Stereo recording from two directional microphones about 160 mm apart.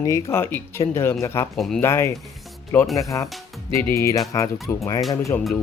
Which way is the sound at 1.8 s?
15° left (ahead or behind).